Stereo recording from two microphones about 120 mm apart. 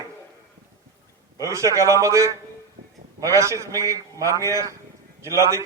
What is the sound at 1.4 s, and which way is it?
A man's voice, 25° right (ahead or behind).